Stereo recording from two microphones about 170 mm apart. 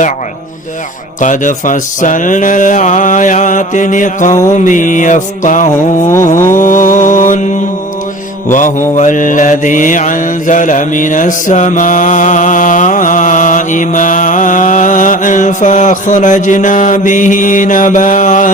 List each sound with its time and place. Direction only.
1.2 s mantra: 50° left (ahead or behind)
8.5 s mantra: 50° left (ahead or behind)